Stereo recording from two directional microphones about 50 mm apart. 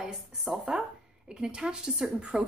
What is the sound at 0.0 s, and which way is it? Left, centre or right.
A woman's voice, centre.